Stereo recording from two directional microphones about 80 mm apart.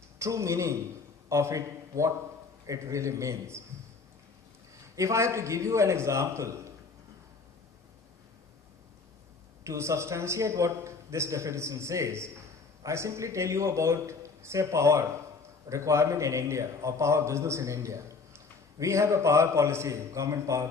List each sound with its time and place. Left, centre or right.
0.2 s a man's voice: right
4.9 s a man's voice: right
9.6 s a man's voice: right